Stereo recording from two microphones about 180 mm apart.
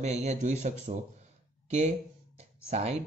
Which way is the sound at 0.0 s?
40° right (ahead or behind).